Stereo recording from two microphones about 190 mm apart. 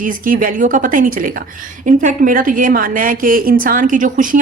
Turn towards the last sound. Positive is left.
turn(degrees=-45)  # may be behind; listen again after turning